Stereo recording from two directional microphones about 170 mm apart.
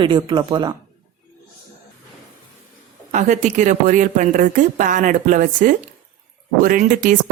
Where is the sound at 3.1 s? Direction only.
45° right (ahead or behind).